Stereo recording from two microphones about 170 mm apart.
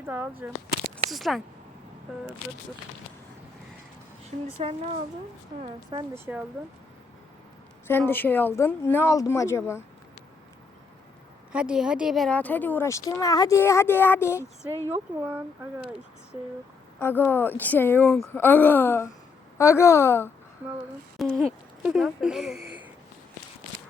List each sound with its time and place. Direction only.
0.0 s speech: 10° right (ahead or behind)
1.1 s speech: centre (ahead or behind)
6.3 s speech: 10° right (ahead or behind)
7.9 s speech: 10° left (ahead or behind)
11.5 s speech: 5° right (ahead or behind); by 14.8 s 15° left (ahead or behind)
14.8 s speech: 15° right (ahead or behind)
17.0 s speech: 10° left (ahead or behind)
21.2 s speech: centre (ahead or behind)